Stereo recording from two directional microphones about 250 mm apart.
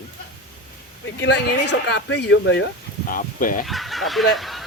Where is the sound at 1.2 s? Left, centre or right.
Left.